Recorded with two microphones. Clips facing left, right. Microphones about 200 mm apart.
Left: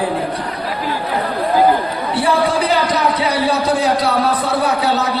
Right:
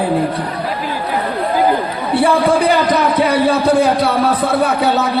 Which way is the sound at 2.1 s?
55° right (ahead or behind).